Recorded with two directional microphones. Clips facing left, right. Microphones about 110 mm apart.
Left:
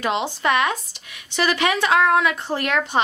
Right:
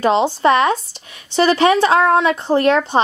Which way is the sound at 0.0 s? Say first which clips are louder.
Right 8 dB; 30° right (ahead or behind).